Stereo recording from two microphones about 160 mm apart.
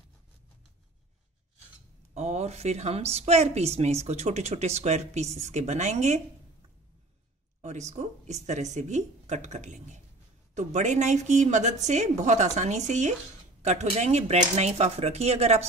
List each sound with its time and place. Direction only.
2.1 s a woman's voice: 45° right (ahead or behind)
7.6 s a woman's voice: 45° right (ahead or behind)